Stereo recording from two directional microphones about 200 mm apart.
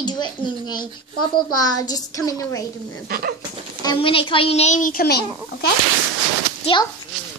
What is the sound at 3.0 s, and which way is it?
Speech, 45° right (ahead or behind).